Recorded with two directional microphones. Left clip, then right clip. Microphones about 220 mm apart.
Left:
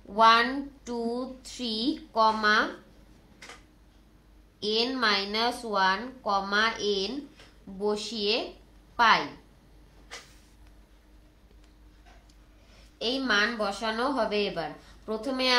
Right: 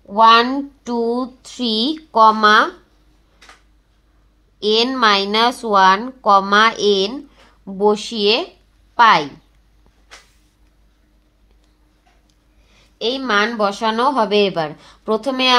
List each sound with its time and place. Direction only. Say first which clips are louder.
0.1 s a woman's voice: right 10 dB; 45° right (ahead or behind)
4.6 s a woman's voice: right 12 dB; 45° right (ahead or behind)
12.7 s a woman's voice: right 9 dB; 45° right (ahead or behind)